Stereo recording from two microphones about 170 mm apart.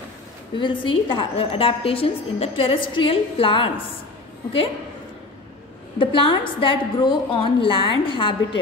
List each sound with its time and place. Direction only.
0.6 s a woman's voice: 30° left (ahead or behind)
5.9 s a woman's voice: 30° left (ahead or behind)